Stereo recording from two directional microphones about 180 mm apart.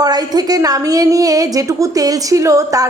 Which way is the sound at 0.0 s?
20° right (ahead or behind).